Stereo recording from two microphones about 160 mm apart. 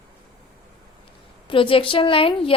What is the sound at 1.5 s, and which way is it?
A woman's voice, 35° left (ahead or behind).